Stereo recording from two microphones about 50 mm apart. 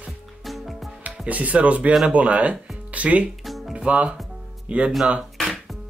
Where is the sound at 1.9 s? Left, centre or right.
Centre.